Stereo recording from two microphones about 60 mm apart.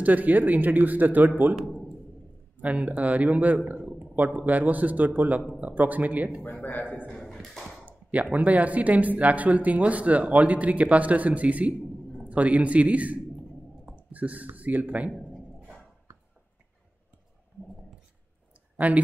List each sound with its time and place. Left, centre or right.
0.0 s speech: right
2.6 s speech: right
6.4 s a man's voice: left
7.1 s a sound: centre
7.8 s speech: right
18.9 s speech: right